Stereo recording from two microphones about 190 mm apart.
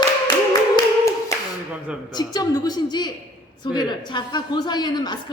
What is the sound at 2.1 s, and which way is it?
A woman's voice, 20° left (ahead or behind).